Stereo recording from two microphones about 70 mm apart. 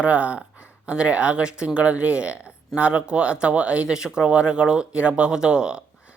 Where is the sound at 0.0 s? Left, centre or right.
Centre.